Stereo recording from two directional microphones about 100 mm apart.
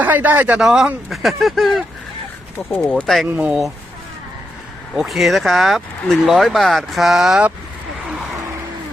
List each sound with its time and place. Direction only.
0.0 s speech: 15° right (ahead or behind)
0.6 s speech: 5° right (ahead or behind)
3.0 s speech: centre (ahead or behind)
3.3 s speech: 15° right (ahead or behind)
4.9 s speech: centre (ahead or behind)